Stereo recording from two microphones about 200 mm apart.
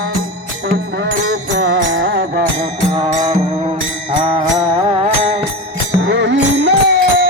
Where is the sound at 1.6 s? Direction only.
65° right (ahead or behind).